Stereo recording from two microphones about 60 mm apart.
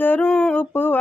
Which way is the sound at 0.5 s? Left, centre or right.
Left.